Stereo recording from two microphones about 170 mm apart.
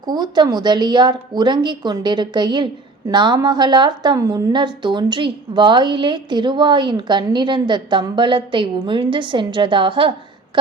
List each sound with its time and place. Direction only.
0.1 s a woman's voice: 25° right (ahead or behind)